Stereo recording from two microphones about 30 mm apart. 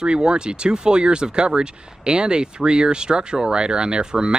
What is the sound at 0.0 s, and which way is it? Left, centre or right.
Speech, right.